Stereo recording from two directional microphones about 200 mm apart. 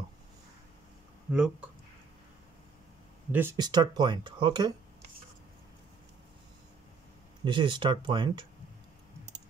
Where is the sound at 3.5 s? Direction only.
20° right (ahead or behind).